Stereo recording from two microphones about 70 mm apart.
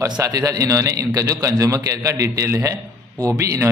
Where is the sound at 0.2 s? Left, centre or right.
Right.